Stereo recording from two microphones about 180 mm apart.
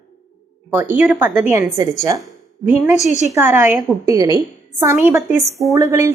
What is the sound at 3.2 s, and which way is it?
A woman's voice, 15° right (ahead or behind).